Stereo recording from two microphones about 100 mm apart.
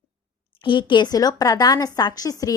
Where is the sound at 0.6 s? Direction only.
55° left (ahead or behind); by 2.5 s 35° left (ahead or behind).